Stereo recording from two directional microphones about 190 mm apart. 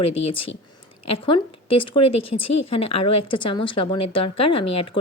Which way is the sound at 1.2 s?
25° left (ahead or behind).